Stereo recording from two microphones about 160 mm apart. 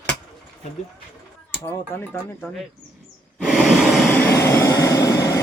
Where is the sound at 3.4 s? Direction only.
Centre (ahead or behind).